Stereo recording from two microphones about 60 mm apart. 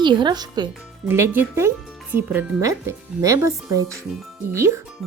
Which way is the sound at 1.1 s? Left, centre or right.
Right.